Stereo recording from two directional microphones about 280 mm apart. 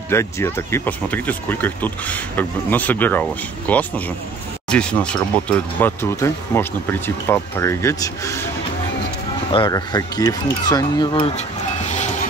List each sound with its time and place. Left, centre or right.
0.1 s speech: centre
9.5 s speech: centre